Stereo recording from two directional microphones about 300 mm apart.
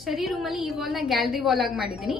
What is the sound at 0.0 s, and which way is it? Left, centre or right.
A woman's voice, centre.